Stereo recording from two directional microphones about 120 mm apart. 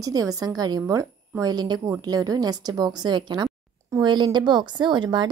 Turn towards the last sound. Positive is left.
turn(degrees=-40)  # may be behind; listen again after turning